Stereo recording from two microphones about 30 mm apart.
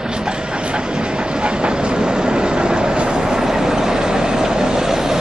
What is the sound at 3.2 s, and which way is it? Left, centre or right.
Vehicle, centre.